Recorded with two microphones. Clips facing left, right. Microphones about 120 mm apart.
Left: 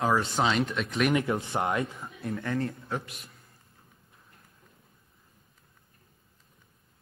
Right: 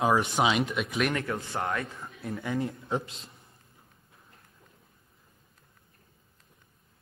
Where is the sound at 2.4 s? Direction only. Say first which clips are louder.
Right 1 dB; 15° right (ahead or behind).